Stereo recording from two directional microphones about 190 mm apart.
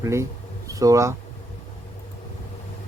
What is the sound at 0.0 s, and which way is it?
Speech, 15° right (ahead or behind).